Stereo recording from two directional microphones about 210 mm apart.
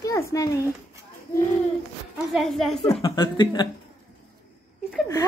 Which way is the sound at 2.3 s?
Centre (ahead or behind).